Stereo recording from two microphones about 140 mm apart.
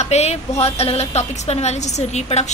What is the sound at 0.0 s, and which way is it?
A woman's voice, 50° left (ahead or behind).